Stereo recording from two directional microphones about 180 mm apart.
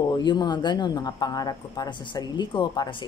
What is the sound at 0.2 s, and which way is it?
Speech, 25° left (ahead or behind).